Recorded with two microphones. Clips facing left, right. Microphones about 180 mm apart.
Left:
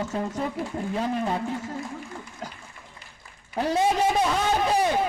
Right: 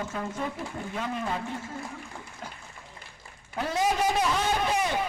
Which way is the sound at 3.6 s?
30° left (ahead or behind).